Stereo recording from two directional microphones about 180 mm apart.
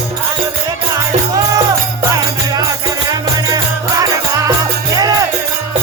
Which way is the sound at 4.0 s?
20° right (ahead or behind).